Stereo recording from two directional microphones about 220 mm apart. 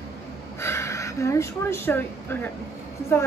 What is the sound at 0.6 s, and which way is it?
A woman's voice, 10° left (ahead or behind).